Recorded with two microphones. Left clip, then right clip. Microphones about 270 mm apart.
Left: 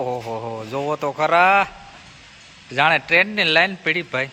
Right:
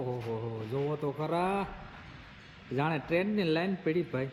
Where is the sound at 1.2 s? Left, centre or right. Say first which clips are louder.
Left 19 dB; left.